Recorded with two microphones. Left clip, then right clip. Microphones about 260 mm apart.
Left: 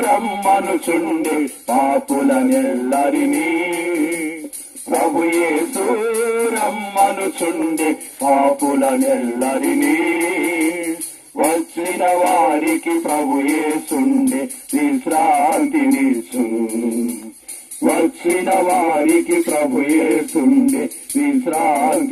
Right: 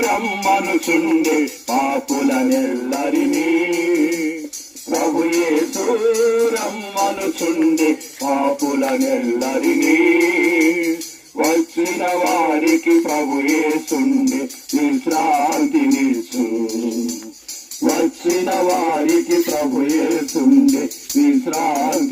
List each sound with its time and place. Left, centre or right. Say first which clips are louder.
0.0 s music: left 2 dB; left
17.8 s music: left 1 dB; left